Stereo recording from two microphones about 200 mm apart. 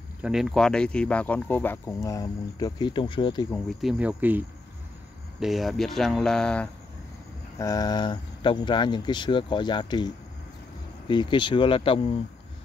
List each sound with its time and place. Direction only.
0.2 s speech: centre (ahead or behind); by 3.5 s 20° left (ahead or behind)
3.5 s speech: centre (ahead or behind)
7.5 s speech: 15° left (ahead or behind)